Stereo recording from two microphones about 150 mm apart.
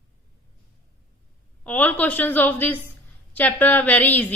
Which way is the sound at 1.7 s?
10° left (ahead or behind).